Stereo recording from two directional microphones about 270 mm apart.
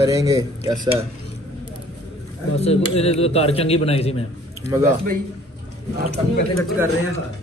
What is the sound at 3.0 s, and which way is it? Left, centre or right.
A man's voice, left.